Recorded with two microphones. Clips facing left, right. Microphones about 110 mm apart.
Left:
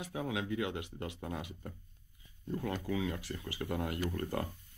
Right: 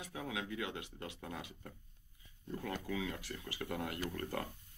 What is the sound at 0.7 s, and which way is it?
Speech, 10° left (ahead or behind).